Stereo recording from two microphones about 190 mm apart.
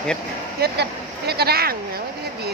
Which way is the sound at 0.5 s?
60° right (ahead or behind).